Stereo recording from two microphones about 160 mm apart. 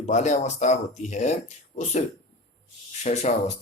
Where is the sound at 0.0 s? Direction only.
45° left (ahead or behind).